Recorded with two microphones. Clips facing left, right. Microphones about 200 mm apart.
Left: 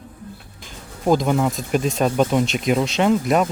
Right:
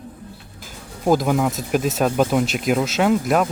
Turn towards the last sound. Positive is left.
turn(degrees=0)  # may be behind; listen again after turning